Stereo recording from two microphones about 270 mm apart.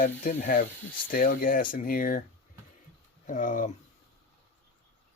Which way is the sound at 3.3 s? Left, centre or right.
Left.